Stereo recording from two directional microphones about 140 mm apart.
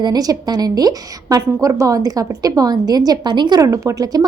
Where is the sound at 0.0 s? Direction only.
30° right (ahead or behind).